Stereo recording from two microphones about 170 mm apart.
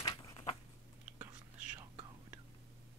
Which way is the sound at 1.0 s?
10° right (ahead or behind).